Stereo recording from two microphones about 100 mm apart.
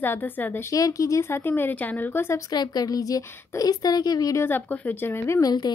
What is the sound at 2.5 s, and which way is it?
A woman's voice, 45° left (ahead or behind).